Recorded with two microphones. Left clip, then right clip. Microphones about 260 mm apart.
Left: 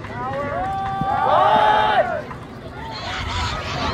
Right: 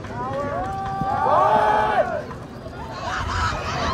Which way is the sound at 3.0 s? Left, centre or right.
Centre.